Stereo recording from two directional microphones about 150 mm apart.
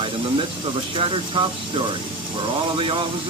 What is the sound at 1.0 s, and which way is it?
Speech, 35° right (ahead or behind).